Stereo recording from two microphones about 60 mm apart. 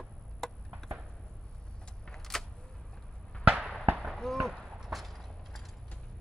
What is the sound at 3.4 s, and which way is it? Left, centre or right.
Fireworks, centre.